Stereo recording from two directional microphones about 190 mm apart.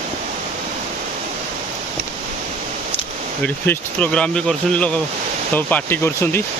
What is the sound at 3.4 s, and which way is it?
Speech, 10° left (ahead or behind).